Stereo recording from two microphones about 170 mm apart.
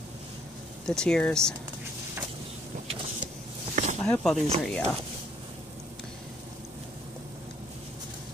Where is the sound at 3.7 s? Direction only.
45° right (ahead or behind).